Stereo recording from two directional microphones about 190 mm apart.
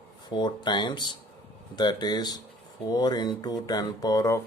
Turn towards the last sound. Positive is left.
turn(degrees=15)  # may be behind; listen again after turning